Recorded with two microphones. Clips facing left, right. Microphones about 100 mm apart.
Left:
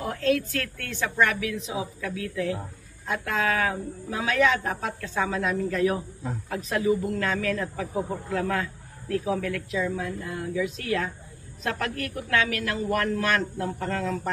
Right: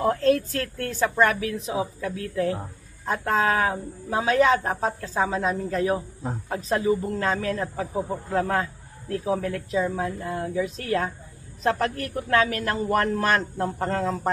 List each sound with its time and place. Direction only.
0.0 s a woman's voice: 40° right (ahead or behind)